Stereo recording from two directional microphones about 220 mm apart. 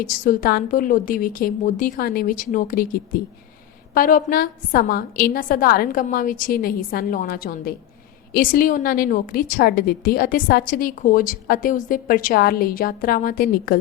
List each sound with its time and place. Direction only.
0.0 s a woman's voice: 40° left (ahead or behind)